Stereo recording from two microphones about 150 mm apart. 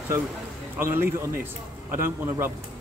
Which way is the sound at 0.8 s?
15° right (ahead or behind).